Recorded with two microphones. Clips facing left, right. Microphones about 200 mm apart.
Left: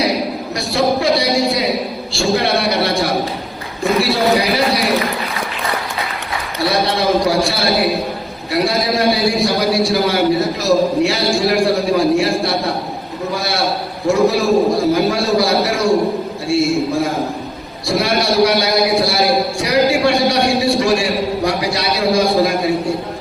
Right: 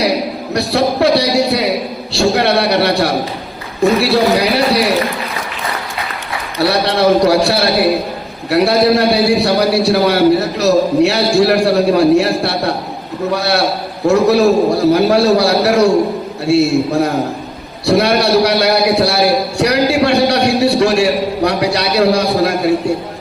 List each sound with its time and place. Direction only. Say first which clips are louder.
0.5 s a man's voice: right 2 dB; 65° right (ahead or behind)
4.1 s a man's voice: right 3 dB; 65° right (ahead or behind)
6.6 s a man's voice: right 4 dB; 65° right (ahead or behind)